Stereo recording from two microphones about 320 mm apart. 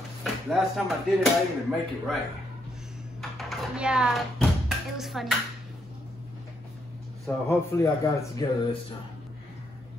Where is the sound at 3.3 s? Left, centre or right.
Centre.